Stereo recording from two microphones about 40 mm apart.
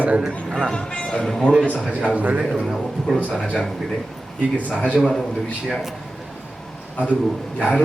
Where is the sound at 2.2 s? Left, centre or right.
Right.